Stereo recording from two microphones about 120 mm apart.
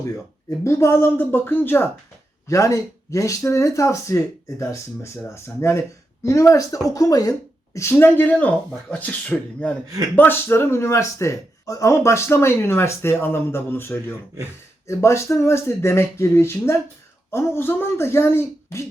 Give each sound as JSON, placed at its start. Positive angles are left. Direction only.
{"t": 0.6, "sound": "speech", "side_deg": 25}